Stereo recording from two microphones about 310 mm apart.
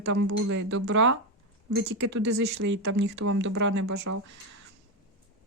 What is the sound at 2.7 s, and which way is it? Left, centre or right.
Speech, right.